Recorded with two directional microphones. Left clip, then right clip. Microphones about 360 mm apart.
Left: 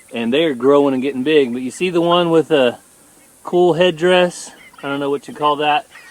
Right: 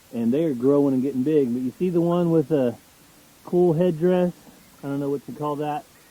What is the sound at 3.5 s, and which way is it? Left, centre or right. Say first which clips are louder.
Speech: left 6 dB; left.